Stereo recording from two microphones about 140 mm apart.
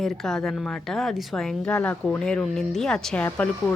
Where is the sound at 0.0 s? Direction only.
5° left (ahead or behind).